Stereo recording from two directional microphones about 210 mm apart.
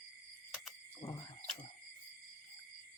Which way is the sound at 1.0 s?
15° left (ahead or behind).